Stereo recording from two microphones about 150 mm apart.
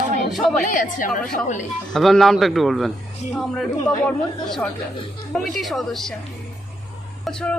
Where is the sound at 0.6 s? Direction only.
60° left (ahead or behind).